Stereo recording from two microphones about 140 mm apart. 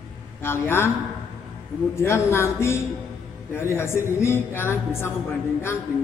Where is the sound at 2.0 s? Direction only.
15° left (ahead or behind).